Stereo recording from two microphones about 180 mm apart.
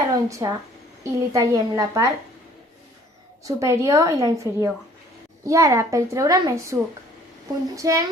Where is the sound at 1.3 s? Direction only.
20° right (ahead or behind).